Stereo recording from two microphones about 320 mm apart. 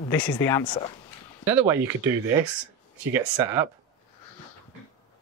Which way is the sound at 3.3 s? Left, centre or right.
Centre.